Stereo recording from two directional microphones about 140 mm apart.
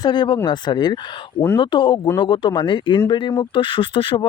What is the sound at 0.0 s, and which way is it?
Speech, 30° left (ahead or behind).